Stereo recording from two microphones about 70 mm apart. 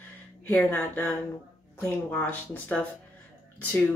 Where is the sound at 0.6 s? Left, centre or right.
Left.